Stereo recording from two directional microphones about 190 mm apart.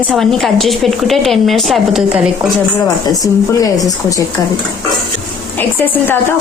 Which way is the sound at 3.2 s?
20° left (ahead or behind).